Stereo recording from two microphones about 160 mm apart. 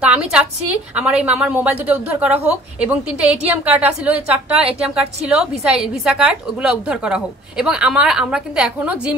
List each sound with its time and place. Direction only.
0.0 s a woman's voice: 5° right (ahead or behind)